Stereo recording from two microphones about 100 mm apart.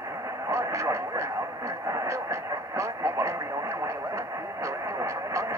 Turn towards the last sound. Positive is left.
turn(degrees=-30)  # may be behind; listen again after turning